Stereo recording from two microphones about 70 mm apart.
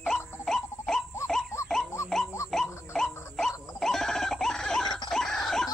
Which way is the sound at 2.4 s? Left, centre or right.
Centre.